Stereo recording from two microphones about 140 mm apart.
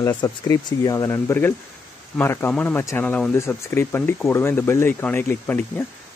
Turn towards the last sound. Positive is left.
turn(degrees=15)  # may be behind; listen again after turning